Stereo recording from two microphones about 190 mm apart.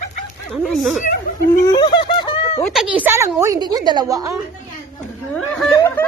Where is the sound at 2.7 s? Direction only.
5° right (ahead or behind).